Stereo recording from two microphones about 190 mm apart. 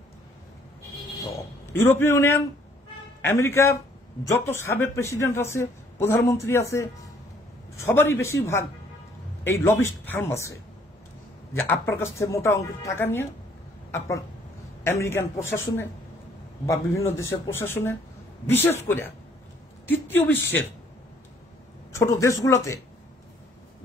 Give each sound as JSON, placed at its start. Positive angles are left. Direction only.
{"t": 1.7, "sound": "a man's voice", "side_deg": 10}
{"t": 11.5, "sound": "a man's voice", "side_deg": 10}
{"t": 17.2, "sound": "a man's voice", "side_deg": 15}
{"t": 21.9, "sound": "a man's voice", "side_deg": 15}